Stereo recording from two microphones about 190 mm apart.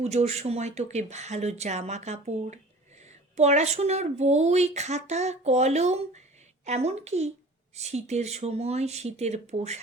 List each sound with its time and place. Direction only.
0.0 s speech: 35° right (ahead or behind)